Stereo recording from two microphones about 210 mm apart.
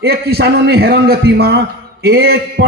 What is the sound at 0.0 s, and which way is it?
A man's voice, 50° right (ahead or behind).